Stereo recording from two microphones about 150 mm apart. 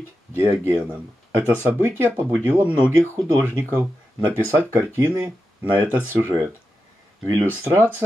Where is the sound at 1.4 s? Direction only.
15° right (ahead or behind).